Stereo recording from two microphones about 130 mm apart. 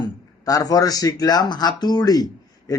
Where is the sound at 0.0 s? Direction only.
30° left (ahead or behind).